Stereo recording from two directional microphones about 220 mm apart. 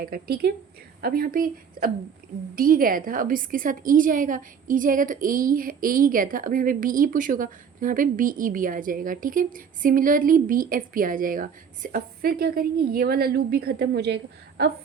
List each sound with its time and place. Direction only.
0.0 s a woman's voice: 40° right (ahead or behind)